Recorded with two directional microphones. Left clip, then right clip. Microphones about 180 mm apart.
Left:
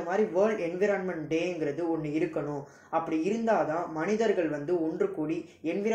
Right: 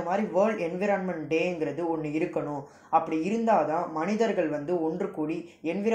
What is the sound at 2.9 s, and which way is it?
Speech, 30° right (ahead or behind).